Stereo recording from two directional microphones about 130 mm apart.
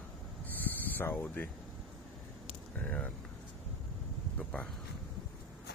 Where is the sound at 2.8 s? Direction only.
10° left (ahead or behind).